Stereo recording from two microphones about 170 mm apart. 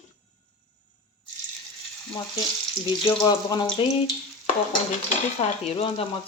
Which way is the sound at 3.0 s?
25° left (ahead or behind).